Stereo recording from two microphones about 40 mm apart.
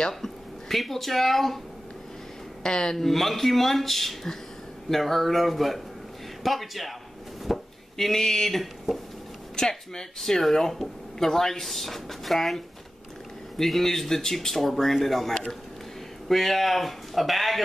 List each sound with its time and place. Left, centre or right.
0.2 s speech: centre
2.6 s speech: centre
7.4 s chopping: centre
8.1 s speech: centre
9.6 s speech: centre